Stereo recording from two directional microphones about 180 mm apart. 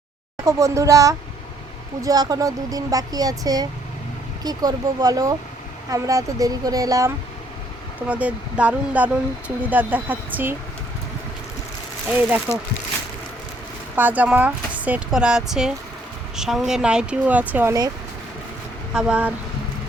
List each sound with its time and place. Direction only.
0.4 s speech: 15° right (ahead or behind)
8.0 s speech: 10° right (ahead or behind)
12.1 s speech: 10° right (ahead or behind)
13.9 s speech: 10° right (ahead or behind)
18.9 s speech: 5° right (ahead or behind)